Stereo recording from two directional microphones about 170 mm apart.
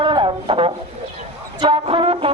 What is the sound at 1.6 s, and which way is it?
Music, 35° right (ahead or behind).